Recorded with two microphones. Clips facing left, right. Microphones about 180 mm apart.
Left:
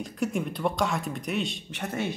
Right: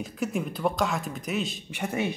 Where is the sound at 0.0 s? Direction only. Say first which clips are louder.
Left 1 dB; centre (ahead or behind).